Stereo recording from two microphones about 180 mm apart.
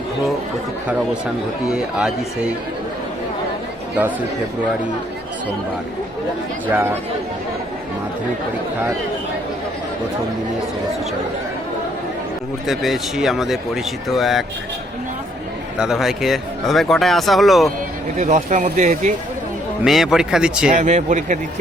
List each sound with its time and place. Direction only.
1.7 s speech: 5° right (ahead or behind)
6.7 s speech: 10° right (ahead or behind)
12.6 s speech: centre (ahead or behind)
15.8 s speech: centre (ahead or behind)
18.2 s speech: 40° right (ahead or behind)
19.8 s speech: centre (ahead or behind)
20.7 s speech: 40° right (ahead or behind)